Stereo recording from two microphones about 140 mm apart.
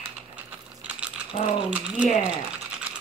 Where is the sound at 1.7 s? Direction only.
10° right (ahead or behind).